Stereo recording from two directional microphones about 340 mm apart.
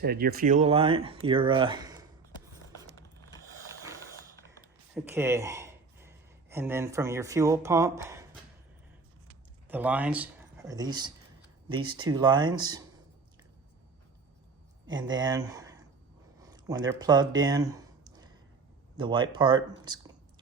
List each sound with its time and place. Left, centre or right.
0.0 s speech: right; by 2.0 s centre
4.9 s speech: centre
9.6 s speech: centre
14.8 s speech: centre
16.4 s a sound: centre
18.9 s speech: centre